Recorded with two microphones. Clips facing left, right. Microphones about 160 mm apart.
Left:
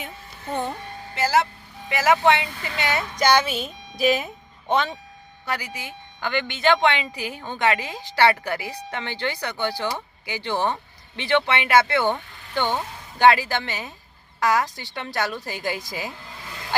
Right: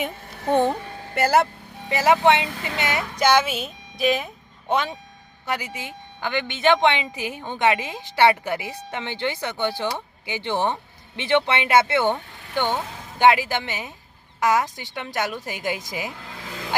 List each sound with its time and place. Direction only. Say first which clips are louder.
0.0 s speech: right 8 dB; 80° right
1.1 s speech: right 2 dB; 55° right (ahead or behind)
1.9 s a woman's voice: right 1 dB; 30° right (ahead or behind)
3.2 s speech: right 1 dB; 10° right (ahead or behind)
4.7 s speech: left 1 dB; 10° right (ahead or behind)
5.5 s a woman's voice: right 1 dB; 25° right (ahead or behind)